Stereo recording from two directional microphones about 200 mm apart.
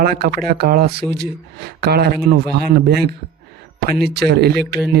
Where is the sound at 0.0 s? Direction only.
50° right (ahead or behind).